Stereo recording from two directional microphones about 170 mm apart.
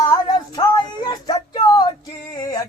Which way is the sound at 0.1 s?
25° left (ahead or behind).